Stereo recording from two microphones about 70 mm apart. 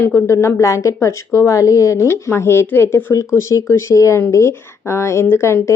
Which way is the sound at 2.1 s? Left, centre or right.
Left.